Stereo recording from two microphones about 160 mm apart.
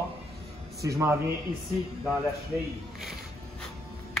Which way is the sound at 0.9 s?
15° right (ahead or behind).